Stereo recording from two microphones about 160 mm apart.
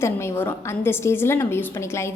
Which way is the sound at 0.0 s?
15° left (ahead or behind).